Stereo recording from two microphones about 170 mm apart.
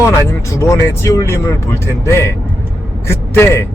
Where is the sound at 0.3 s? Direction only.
15° left (ahead or behind).